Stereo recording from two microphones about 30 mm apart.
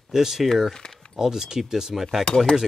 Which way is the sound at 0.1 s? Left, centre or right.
Centre.